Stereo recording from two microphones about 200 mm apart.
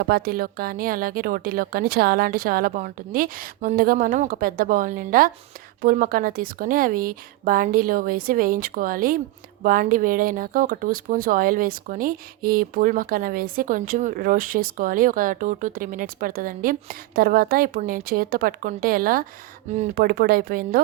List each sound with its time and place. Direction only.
0.0 s speech: 50° right (ahead or behind)